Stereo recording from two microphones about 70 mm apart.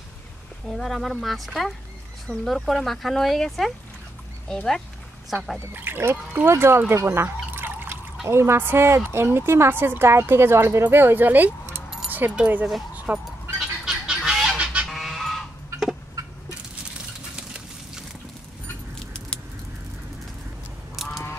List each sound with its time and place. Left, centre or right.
0.7 s speech: centre
5.7 s a woman's voice: right
6.9 s trickle: right
8.3 s a woman's voice: right; by 12.6 s centre
12.9 s bow-wow: right
13.6 s fowl: centre
14.6 s fowl: centre
14.9 s sheep: centre
20.9 s duck: centre